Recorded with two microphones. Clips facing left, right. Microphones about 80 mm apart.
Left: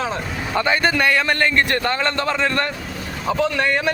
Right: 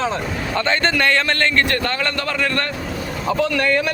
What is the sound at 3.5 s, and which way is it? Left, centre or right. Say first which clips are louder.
Speech: right 1 dB; left.